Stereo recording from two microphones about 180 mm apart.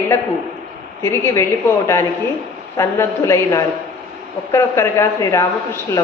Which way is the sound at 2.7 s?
15° left (ahead or behind).